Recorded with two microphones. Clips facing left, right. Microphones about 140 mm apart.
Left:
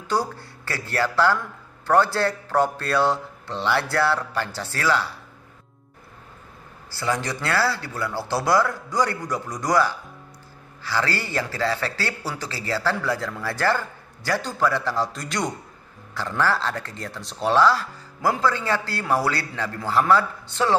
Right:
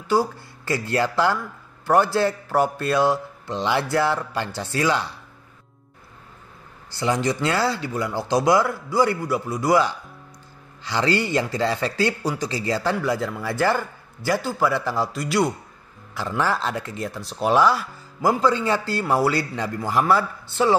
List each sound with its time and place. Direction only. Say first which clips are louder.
0.1 s a man's voice: right 4 dB; 10° right (ahead or behind)
6.9 s a man's voice: right 4 dB; 20° right (ahead or behind)